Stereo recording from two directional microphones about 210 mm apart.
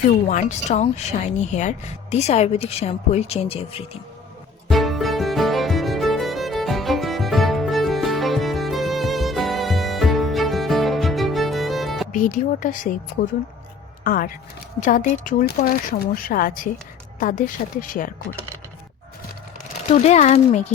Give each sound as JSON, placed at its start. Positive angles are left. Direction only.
{"t": 0.3, "sound": "speech", "side_deg": 35}
{"t": 4.7, "sound": "music", "side_deg": 0}
{"t": 12.1, "sound": "speech", "side_deg": 40}
{"t": 14.0, "sound": "a woman's voice", "side_deg": 40}
{"t": 19.9, "sound": "speech", "side_deg": 30}